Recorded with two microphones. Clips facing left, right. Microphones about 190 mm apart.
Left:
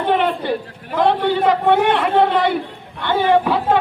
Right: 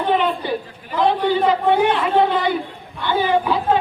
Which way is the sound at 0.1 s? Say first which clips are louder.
Left 2 dB; 65° left (ahead or behind).